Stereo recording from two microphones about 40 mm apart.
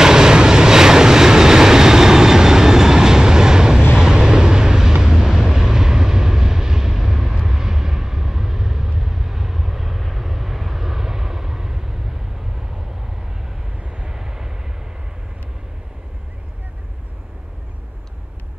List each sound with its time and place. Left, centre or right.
0.0 s vehicle: centre
13.7 s vehicle: right
14.0 s vehicle: centre